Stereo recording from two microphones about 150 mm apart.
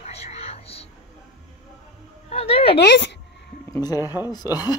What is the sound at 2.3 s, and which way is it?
Speech, 40° left (ahead or behind).